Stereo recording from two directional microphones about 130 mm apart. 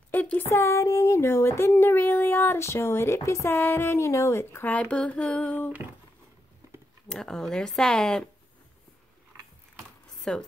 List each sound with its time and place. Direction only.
0.1 s speech: 15° left (ahead or behind)
7.1 s speech: 5° left (ahead or behind)
10.3 s speech: 5° left (ahead or behind)